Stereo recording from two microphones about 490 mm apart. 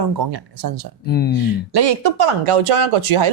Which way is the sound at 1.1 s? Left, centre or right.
Centre.